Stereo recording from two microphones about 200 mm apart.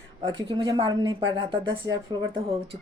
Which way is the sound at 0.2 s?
25° right (ahead or behind).